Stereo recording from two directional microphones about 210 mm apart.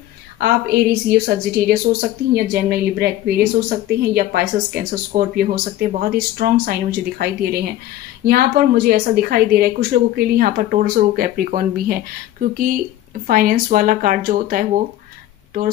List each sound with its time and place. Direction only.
0.4 s a woman's voice: 50° right (ahead or behind)